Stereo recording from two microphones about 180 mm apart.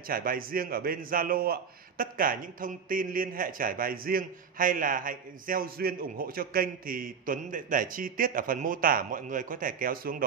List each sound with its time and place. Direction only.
0.1 s a man's voice: 55° right (ahead or behind)